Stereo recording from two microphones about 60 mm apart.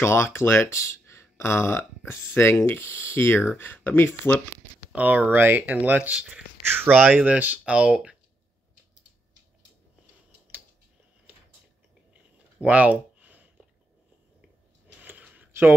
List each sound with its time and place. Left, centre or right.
0.0 s speech: left
4.9 s speech: right
6.1 s speech: centre
6.6 s speech: right
6.9 s speech: right
12.5 s a sound: right
15.0 s a sound: right